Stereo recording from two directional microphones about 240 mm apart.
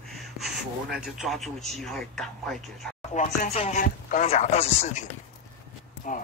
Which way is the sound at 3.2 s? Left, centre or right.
Left.